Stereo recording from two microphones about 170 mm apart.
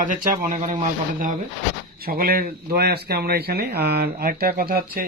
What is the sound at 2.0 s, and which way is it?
Speech, 60° right (ahead or behind).